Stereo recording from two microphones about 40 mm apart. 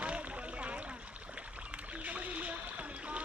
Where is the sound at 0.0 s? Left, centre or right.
Right.